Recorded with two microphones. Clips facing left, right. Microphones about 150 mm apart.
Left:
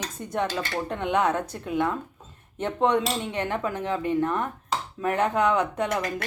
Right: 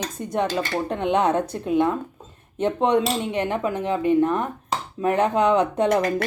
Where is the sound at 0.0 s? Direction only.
20° right (ahead or behind).